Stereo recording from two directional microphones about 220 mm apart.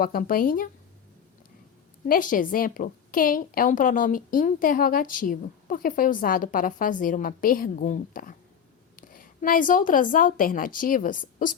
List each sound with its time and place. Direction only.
0.0 s a woman's voice: 40° left (ahead or behind)
2.0 s a woman's voice: 40° left (ahead or behind)